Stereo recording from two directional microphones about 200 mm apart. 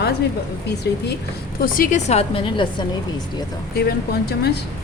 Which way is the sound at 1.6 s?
45° left (ahead or behind).